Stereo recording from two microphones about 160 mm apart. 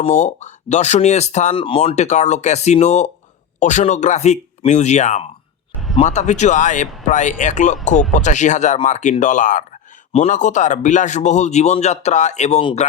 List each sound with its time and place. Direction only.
0.0 s a man's voice: 45° left (ahead or behind)
1.6 s a man's voice: 35° left (ahead or behind)